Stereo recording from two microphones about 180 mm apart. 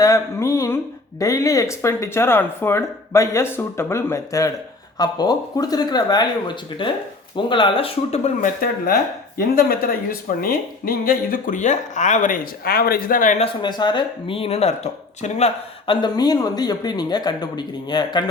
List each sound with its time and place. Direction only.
0.0 s speech: 15° left (ahead or behind); by 8.4 s 35° left (ahead or behind)
9.6 s speech: 55° left (ahead or behind)
13.4 s speech: 25° left (ahead or behind)
16.0 s speech: 25° left (ahead or behind)